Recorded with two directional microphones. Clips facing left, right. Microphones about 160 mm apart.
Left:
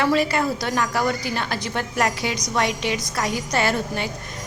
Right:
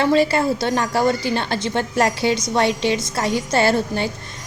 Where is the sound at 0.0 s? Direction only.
30° right (ahead or behind).